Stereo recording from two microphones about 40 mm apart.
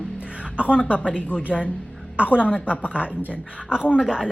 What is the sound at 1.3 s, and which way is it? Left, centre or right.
Speech, left.